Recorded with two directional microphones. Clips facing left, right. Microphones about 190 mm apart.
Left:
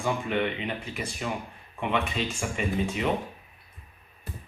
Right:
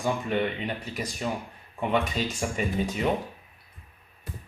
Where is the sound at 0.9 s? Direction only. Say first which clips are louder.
Right 1 dB; 40° right (ahead or behind).